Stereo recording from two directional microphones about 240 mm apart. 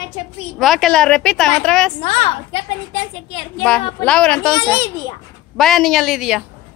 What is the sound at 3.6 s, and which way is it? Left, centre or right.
Speech, centre.